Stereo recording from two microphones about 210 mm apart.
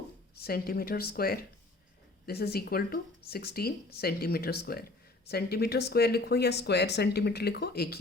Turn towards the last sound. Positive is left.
turn(degrees=50)  # may be behind; listen again after turning